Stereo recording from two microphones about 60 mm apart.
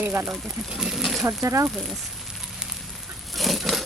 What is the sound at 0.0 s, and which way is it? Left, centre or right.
Speech, right.